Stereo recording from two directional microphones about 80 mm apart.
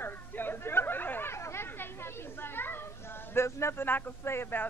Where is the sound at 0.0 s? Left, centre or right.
Left.